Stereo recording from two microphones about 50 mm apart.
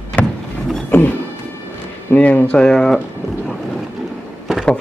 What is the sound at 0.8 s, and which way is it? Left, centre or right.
Music, left.